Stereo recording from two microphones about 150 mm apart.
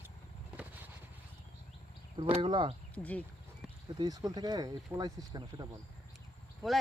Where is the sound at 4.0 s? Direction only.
25° right (ahead or behind).